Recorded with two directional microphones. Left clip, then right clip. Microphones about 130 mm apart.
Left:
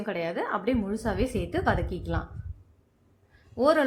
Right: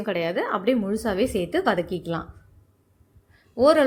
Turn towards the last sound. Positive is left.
turn(degrees=-25)  # may be behind; listen again after turning